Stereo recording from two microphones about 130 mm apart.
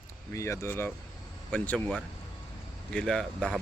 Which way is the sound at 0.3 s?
20° left (ahead or behind).